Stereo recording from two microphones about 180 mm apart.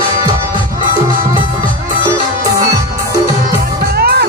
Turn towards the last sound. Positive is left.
turn(degrees=-60)  # may be behind; listen again after turning